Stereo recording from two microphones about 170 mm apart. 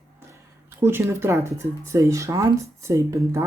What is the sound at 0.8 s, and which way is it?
Speech, 15° right (ahead or behind).